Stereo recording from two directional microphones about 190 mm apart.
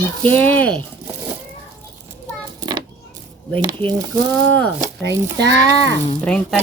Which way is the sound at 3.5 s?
25° right (ahead or behind).